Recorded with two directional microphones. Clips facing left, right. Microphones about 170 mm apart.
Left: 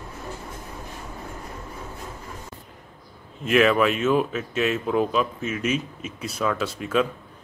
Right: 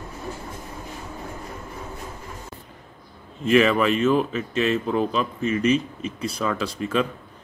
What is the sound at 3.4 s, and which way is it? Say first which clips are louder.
Speech: right 1 dB; centre (ahead or behind).